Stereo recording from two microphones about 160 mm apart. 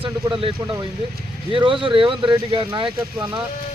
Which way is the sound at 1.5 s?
30° right (ahead or behind).